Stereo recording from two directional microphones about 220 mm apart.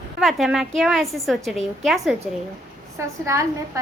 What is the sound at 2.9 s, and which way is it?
Speech, 15° right (ahead or behind).